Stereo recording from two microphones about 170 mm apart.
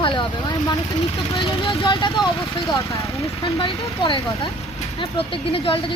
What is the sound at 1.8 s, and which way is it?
Speech, 25° left (ahead or behind).